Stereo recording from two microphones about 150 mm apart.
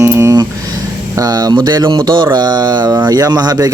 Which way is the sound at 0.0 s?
20° right (ahead or behind).